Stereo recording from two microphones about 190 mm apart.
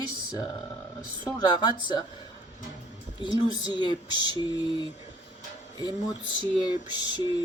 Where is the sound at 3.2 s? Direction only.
25° left (ahead or behind).